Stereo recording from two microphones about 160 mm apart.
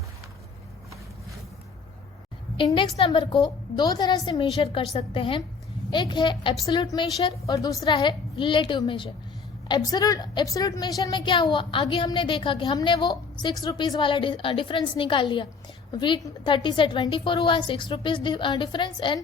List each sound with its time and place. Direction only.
2.6 s a woman's voice: 30° left (ahead or behind)
7.9 s a woman's voice: 30° left (ahead or behind)